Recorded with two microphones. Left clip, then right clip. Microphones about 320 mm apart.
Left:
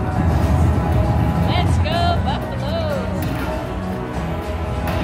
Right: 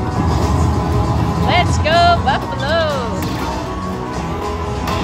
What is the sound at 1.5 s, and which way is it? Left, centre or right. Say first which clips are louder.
Music: right 11 dB; right.